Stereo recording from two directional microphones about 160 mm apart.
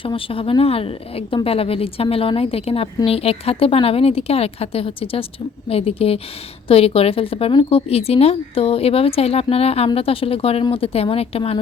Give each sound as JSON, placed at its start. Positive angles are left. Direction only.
{"t": 0.0, "sound": "a woman's voice", "side_deg": 35}